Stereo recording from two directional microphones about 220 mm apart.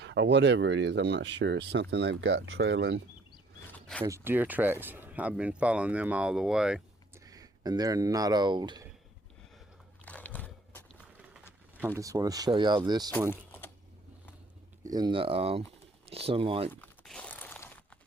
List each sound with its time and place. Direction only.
0.0 s speech: 55° right (ahead or behind)
3.7 s zipper: 5° left (ahead or behind)
4.0 s speech: 10° right (ahead or behind)
7.3 s speech: 15° right (ahead or behind)
10.1 s a sound: 5° left (ahead or behind)
11.9 s speech: 15° right (ahead or behind)
13.3 s typing: 10° left (ahead or behind)
14.8 s speech: 20° right (ahead or behind)
16.8 s a sound: 5° left (ahead or behind)